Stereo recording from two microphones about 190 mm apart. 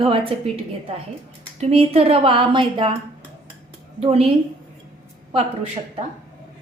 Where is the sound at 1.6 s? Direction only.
30° right (ahead or behind).